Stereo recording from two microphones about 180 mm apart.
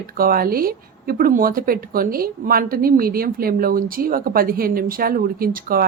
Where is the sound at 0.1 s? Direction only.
55° right (ahead or behind).